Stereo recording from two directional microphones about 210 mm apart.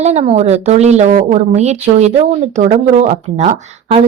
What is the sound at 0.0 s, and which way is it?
A woman's voice, 30° right (ahead or behind).